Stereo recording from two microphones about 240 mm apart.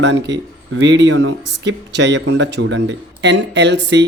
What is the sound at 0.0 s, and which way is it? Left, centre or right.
Speech, right.